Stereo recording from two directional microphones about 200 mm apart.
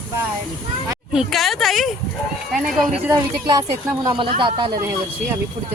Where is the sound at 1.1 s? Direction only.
Centre (ahead or behind).